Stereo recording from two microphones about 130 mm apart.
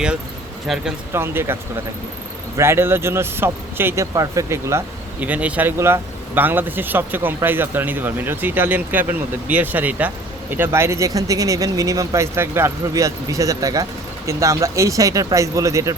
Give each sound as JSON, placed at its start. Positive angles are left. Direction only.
{"t": 0.7, "sound": "speech", "side_deg": 0}
{"t": 1.1, "sound": "speech", "side_deg": -20}
{"t": 2.6, "sound": "speech", "side_deg": -20}